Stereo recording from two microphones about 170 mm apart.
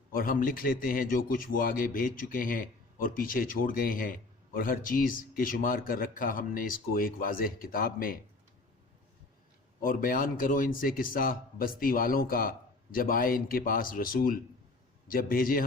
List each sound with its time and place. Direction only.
0.1 s a man's voice: 55° left (ahead or behind)
9.8 s a man's voice: 55° left (ahead or behind)